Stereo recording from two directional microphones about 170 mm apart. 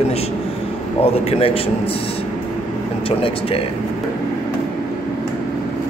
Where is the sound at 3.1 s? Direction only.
35° left (ahead or behind).